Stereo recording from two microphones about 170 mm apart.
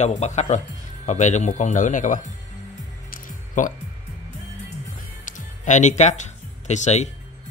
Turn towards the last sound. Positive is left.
turn(degrees=45)  # may be behind; listen again after turning